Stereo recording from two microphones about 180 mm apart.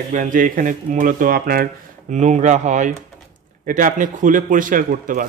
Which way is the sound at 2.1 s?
40° right (ahead or behind).